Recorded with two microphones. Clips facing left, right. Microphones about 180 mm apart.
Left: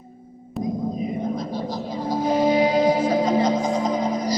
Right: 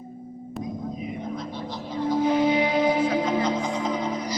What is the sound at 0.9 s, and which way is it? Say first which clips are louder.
Music: left 6 dB; 40° left (ahead or behind).